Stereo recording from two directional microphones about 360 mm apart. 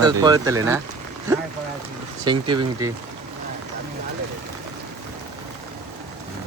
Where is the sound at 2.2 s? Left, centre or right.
Centre.